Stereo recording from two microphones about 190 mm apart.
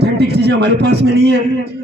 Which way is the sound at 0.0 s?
60° right (ahead or behind).